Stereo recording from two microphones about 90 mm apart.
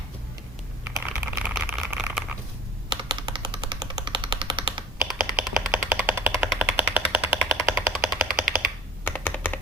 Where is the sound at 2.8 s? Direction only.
60° right (ahead or behind).